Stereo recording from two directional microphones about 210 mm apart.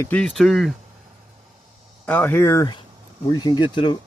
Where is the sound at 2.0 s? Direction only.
10° left (ahead or behind).